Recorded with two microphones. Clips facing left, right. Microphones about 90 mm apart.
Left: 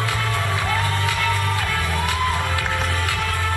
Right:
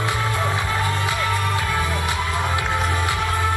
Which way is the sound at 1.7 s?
20° right (ahead or behind).